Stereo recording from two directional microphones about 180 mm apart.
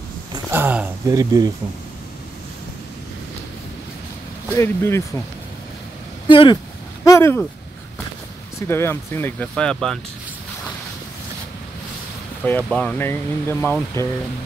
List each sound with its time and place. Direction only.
0.5 s a sound: 10° right (ahead or behind)
4.5 s speech: 15° left (ahead or behind)
6.2 s speech: 25° left (ahead or behind)
7.1 s speech: 15° left (ahead or behind)
8.5 s speech: 15° left (ahead or behind)
12.4 s speech: 5° left (ahead or behind)